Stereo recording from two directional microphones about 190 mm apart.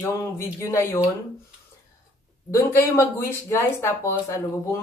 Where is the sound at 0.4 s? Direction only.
15° left (ahead or behind).